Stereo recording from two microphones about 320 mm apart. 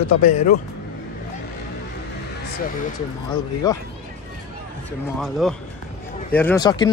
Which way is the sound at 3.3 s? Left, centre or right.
Centre.